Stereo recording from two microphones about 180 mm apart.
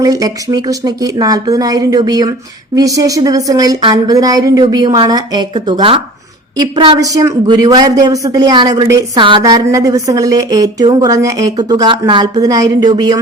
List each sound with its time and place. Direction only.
0.0 s speech: 20° right (ahead or behind)